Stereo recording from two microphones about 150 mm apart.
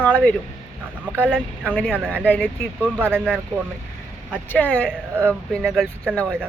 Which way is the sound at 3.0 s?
15° right (ahead or behind).